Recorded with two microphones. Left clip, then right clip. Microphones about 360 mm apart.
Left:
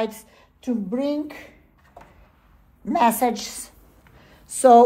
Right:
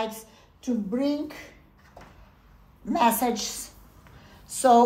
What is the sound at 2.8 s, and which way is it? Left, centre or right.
Speech, left.